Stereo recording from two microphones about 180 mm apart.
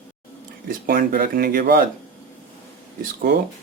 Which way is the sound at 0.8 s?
55° right (ahead or behind).